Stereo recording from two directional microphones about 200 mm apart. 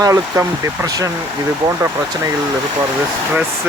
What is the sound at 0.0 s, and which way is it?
Speech, 15° right (ahead or behind).